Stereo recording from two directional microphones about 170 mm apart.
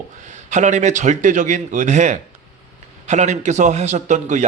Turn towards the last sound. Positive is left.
turn(degrees=-45)  # may be behind; listen again after turning